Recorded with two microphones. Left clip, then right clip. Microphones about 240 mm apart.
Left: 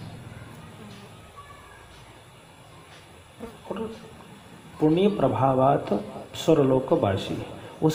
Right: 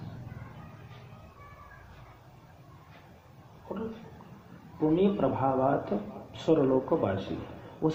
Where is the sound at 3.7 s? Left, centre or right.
Left.